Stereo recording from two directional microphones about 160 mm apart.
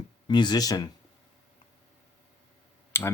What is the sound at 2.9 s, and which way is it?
Speech, 15° left (ahead or behind).